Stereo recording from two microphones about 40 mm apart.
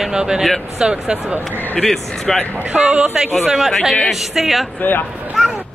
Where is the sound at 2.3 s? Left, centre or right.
Centre.